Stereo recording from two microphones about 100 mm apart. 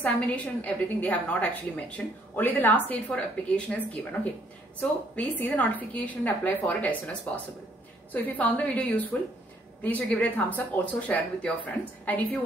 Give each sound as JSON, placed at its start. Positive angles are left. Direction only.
{"t": 0.0, "sound": "a woman's voice", "side_deg": 15}